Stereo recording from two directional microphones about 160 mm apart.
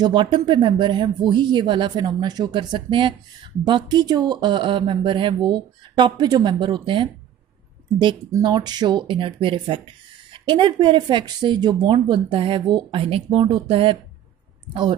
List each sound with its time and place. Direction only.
0.0 s speech: 30° right (ahead or behind)